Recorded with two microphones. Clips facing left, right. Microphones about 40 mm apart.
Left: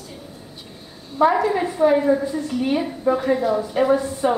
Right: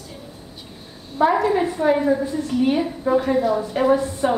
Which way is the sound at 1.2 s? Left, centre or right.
Centre.